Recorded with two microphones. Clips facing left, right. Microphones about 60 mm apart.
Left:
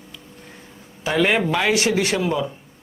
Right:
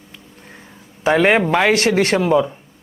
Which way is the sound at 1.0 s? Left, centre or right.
Right.